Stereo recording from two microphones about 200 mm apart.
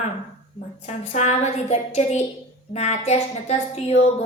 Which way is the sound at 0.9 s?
35° left (ahead or behind).